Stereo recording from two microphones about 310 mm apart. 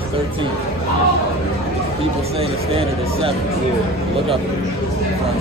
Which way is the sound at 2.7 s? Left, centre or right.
Centre.